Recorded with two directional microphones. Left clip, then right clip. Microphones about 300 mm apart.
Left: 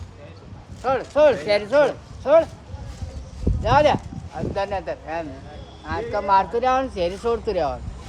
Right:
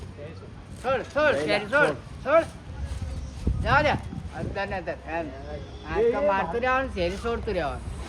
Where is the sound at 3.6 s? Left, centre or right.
Left.